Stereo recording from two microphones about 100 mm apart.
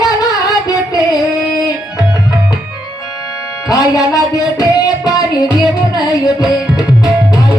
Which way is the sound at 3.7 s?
35° left (ahead or behind).